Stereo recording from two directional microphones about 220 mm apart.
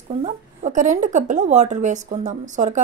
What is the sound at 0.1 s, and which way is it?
Speech, 30° right (ahead or behind).